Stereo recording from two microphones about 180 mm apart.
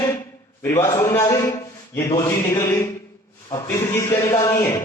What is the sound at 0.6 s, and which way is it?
Speech, 15° left (ahead or behind).